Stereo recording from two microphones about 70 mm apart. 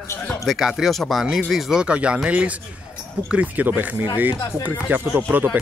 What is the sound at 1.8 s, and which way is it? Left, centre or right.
Speech, centre.